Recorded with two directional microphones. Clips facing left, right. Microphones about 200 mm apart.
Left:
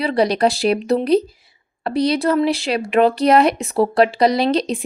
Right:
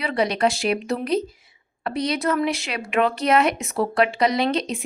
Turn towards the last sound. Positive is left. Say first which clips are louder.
# left 4 dB
turn(degrees=35)  # may be behind; listen again after turning